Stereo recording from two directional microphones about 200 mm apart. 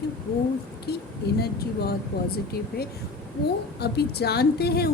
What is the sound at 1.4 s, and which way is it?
Speech, 50° left (ahead or behind).